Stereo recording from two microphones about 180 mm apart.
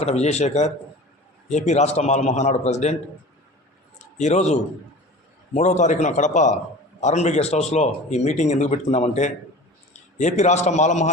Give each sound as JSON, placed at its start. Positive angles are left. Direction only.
{"t": 0.0, "sound": "a man's voice", "side_deg": 35}
{"t": 3.9, "sound": "a man's voice", "side_deg": 40}